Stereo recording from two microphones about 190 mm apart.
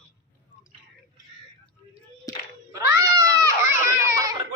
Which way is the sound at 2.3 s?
20° left (ahead or behind).